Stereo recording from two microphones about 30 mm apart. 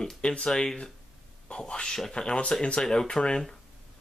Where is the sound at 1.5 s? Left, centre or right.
Left.